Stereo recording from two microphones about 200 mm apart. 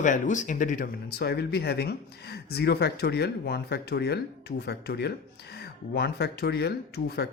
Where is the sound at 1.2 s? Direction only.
55° left (ahead or behind).